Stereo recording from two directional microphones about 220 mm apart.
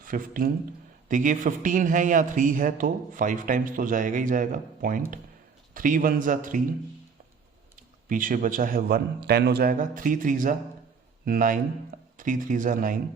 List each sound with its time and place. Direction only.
0.0 s a man's voice: 40° right (ahead or behind)
7.8 s a man's voice: 40° right (ahead or behind)